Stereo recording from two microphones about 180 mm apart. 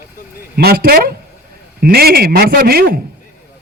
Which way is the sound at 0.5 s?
60° right (ahead or behind).